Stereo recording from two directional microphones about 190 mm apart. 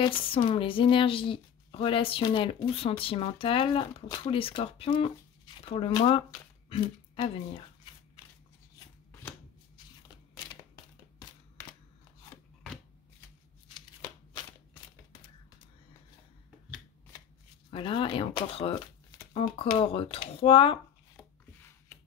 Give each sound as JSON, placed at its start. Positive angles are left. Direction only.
{"t": 0.0, "sound": "speech", "side_deg": 25}
{"t": 10.3, "sound": "a sound", "side_deg": 20}
{"t": 13.7, "sound": "shuffling cards", "side_deg": 25}
{"t": 17.6, "sound": "speech", "side_deg": 25}